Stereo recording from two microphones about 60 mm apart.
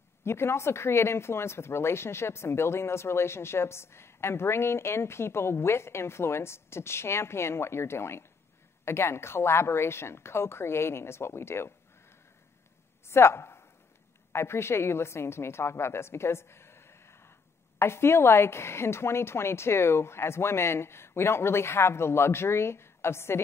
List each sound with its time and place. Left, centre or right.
0.2 s a woman's voice: left